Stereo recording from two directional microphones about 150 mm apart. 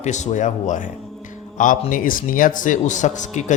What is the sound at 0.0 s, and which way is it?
A man's voice, 50° left (ahead or behind).